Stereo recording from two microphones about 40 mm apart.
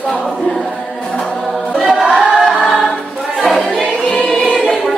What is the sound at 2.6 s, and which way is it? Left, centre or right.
Choir, centre.